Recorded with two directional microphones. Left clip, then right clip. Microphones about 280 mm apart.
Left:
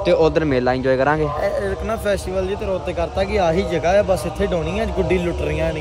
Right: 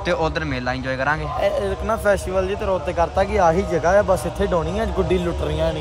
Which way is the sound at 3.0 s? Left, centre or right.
Centre.